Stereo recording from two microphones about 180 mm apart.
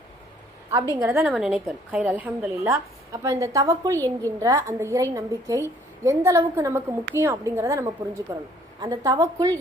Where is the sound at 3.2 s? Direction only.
20° right (ahead or behind).